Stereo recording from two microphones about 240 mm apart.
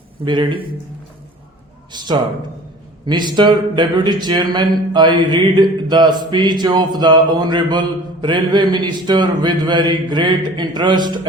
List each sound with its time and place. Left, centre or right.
0.3 s speech: centre
1.9 s speech: centre